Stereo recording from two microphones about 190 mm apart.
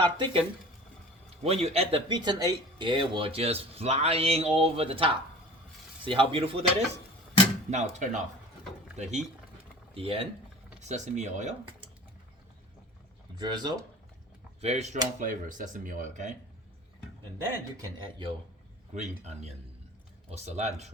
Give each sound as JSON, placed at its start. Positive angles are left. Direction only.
{"t": 0.0, "sound": "speech", "side_deg": -25}
{"t": 1.5, "sound": "speech", "side_deg": -30}
{"t": 13.3, "sound": "speech", "side_deg": -20}
{"t": 14.6, "sound": "speech", "side_deg": -35}
{"t": 17.7, "sound": "speech", "side_deg": -25}
{"t": 18.9, "sound": "speech", "side_deg": -35}